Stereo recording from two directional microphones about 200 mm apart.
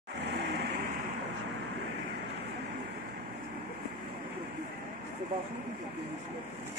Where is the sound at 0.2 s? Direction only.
60° right (ahead or behind).